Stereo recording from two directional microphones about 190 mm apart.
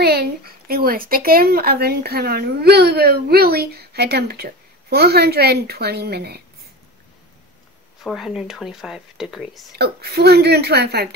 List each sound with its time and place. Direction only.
0.0 s speech: 55° right (ahead or behind)
8.0 s speech: centre (ahead or behind)
9.8 s speech: 60° right (ahead or behind)